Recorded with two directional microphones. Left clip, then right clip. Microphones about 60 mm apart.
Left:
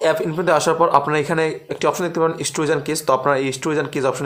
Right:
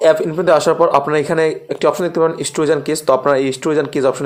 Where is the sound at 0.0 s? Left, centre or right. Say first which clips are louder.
Right 6 dB; right.